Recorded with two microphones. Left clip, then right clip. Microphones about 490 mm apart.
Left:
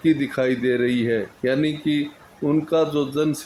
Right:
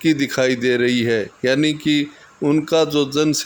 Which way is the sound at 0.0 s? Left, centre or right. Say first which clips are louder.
Right 3 dB; centre.